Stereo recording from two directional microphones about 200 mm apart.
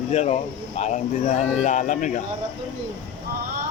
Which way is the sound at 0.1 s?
35° left (ahead or behind).